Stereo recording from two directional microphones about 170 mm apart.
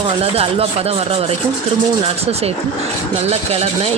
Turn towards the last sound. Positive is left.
turn(degrees=-35)  # may be behind; listen again after turning